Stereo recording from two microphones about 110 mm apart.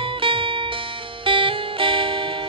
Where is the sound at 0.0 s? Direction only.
55° right (ahead or behind).